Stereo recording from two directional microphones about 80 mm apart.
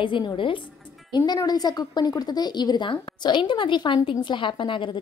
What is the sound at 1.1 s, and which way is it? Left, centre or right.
A woman's voice, left.